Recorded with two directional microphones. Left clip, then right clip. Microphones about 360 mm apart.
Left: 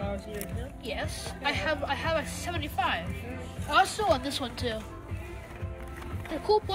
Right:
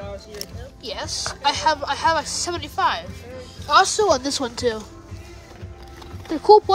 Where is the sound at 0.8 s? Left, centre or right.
Centre.